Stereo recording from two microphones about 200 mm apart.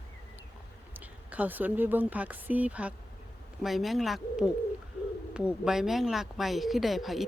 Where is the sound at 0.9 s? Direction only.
10° right (ahead or behind).